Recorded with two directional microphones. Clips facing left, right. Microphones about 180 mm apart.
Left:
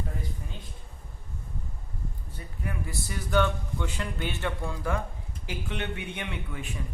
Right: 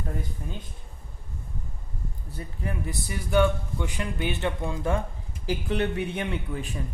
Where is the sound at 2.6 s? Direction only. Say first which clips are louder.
Right 2 dB; 20° right (ahead or behind).